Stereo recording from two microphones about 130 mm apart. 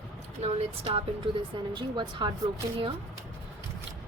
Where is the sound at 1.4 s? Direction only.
35° right (ahead or behind).